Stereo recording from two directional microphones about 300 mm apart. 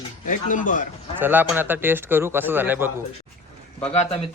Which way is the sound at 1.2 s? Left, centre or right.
Centre.